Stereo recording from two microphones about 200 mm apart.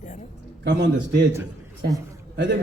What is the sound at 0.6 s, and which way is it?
Speech, 65° right (ahead or behind).